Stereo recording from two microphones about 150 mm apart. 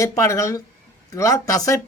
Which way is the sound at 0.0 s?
20° left (ahead or behind).